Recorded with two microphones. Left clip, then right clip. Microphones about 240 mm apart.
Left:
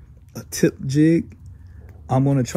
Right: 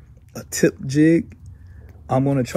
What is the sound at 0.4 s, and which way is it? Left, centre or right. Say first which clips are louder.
Speech: right 2 dB; centre.